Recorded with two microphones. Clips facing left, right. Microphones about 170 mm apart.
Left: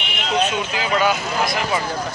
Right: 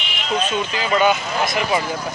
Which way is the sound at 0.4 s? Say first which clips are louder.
Left 2 dB; 10° left (ahead or behind).